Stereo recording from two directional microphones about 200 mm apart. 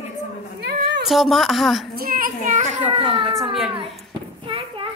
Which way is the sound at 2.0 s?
45° right (ahead or behind).